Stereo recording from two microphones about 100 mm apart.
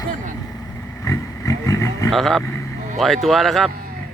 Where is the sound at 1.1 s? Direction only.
35° left (ahead or behind).